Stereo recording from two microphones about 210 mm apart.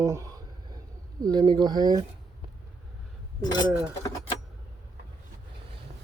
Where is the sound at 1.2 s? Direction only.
20° right (ahead or behind).